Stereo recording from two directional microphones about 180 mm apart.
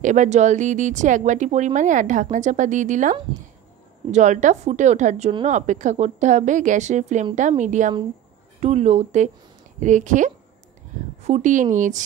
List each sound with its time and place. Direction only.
0.0 s a woman's voice: 40° right (ahead or behind)